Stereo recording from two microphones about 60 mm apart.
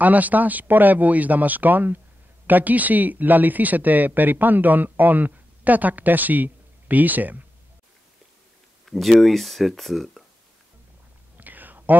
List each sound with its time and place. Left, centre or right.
0.0 s speech: right
8.8 s speech: centre
11.3 s whispering: right